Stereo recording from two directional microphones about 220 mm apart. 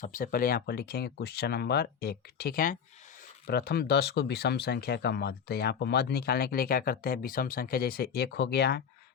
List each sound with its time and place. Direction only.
0.0 s speech: 40° left (ahead or behind)